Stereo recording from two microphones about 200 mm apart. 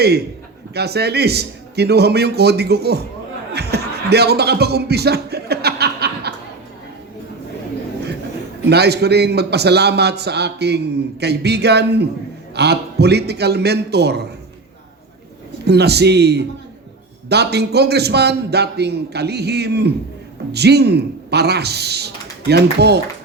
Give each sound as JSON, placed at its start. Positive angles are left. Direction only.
{"t": 0.7, "sound": "a man's voice", "side_deg": -55}
{"t": 3.5, "sound": "a sound", "side_deg": -55}
{"t": 8.7, "sound": "a man's voice", "side_deg": -55}
{"t": 15.6, "sound": "a man's voice", "side_deg": -55}